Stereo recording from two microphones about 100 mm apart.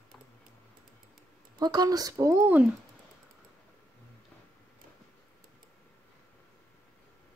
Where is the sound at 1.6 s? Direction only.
40° right (ahead or behind).